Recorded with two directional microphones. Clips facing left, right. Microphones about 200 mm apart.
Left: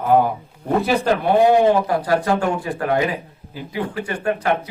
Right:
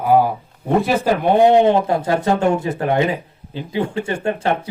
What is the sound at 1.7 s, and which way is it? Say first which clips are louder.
Speech: right 1 dB; 25° right (ahead or behind).